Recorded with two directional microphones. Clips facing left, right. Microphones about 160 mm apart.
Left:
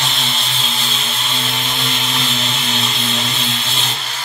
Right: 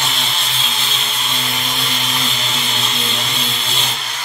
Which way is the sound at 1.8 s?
Centre (ahead or behind).